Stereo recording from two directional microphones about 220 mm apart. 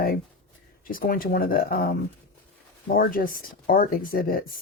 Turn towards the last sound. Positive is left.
turn(degrees=40)  # may be behind; listen again after turning